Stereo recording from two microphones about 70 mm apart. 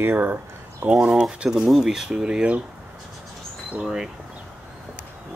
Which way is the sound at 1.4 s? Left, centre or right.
Centre.